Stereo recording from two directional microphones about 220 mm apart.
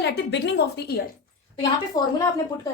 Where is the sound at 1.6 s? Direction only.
15° left (ahead or behind).